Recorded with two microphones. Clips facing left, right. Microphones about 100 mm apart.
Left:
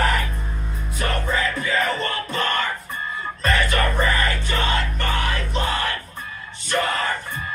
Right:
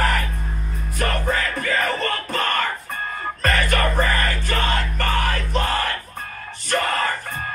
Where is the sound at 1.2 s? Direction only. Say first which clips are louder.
Even; 45° right (ahead or behind).